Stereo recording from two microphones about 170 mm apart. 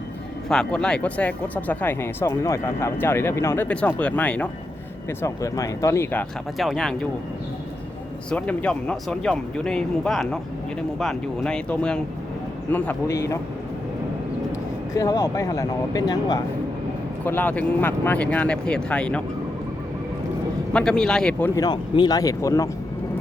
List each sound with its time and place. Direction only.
0.4 s speech: 5° left (ahead or behind)
5.2 s speech: 20° left (ahead or behind)
6.6 s speech: centre (ahead or behind)
8.3 s speech: 10° left (ahead or behind)
14.9 s speech: 20° left (ahead or behind)
17.2 s speech: 10° left (ahead or behind)
20.7 s speech: 5° left (ahead or behind)
21.5 s speech: 25° left (ahead or behind)